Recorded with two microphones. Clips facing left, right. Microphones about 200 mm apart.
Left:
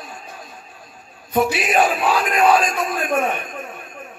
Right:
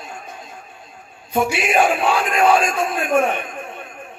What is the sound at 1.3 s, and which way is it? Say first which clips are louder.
A man's voice: even; 25° right (ahead or behind).